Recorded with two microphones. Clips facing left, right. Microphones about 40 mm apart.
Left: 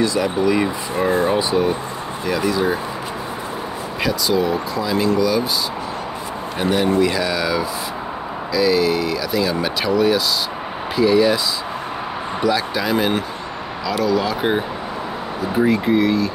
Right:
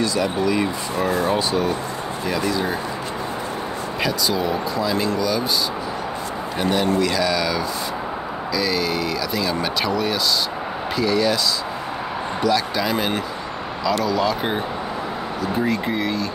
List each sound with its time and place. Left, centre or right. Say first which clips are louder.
0.0 s speech: left 3 dB; centre
0.9 s speech: left 4 dB; left
2.2 s speech: left 4 dB; centre
4.0 s speech: left 3 dB; centre
6.6 s speech: left 3 dB; centre
12.4 s speech: left 1 dB; centre
15.6 s speech: left 9 dB; centre